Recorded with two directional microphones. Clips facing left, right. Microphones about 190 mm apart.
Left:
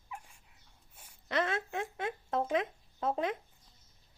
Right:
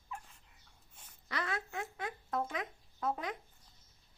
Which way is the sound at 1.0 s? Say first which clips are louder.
Left 2 dB; 10° left (ahead or behind).